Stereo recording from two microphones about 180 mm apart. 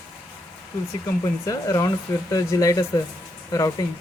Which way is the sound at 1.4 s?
20° left (ahead or behind).